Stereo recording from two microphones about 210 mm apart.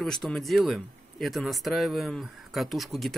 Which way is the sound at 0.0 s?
Centre (ahead or behind).